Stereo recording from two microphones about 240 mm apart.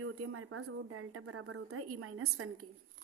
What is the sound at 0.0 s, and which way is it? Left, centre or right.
A woman's voice, right.